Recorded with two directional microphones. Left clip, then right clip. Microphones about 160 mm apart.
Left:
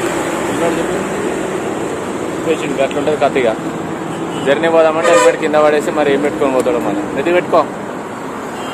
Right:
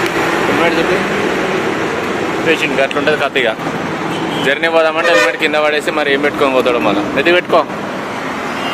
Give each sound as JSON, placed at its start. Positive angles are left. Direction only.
{"t": 3.2, "sound": "speech", "side_deg": 0}